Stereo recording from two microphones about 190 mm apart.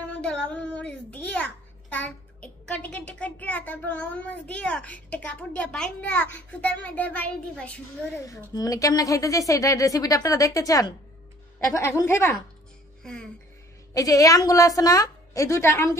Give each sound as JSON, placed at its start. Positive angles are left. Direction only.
{"t": 0.0, "sound": "a child's voice", "side_deg": 5}
{"t": 8.3, "sound": "a woman's voice", "side_deg": 15}
{"t": 13.0, "sound": "speech", "side_deg": 5}
{"t": 13.9, "sound": "a woman's voice", "side_deg": 20}